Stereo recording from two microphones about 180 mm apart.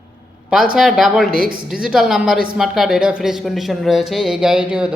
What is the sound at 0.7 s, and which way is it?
A man's voice, centre (ahead or behind).